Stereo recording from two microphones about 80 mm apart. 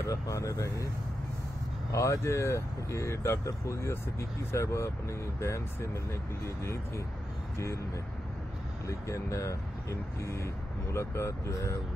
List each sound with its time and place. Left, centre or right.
0.0 s speech: left
1.9 s speech: left
8.8 s speech: left